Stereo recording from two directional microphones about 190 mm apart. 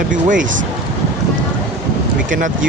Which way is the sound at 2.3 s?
45° right (ahead or behind).